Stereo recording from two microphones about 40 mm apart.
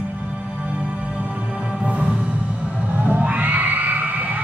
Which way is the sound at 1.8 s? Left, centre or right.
Right.